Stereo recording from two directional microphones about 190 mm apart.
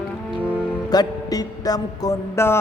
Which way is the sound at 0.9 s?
20° left (ahead or behind).